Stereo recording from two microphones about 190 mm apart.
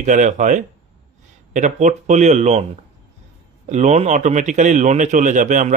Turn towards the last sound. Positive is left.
turn(degrees=-40)  # may be behind; listen again after turning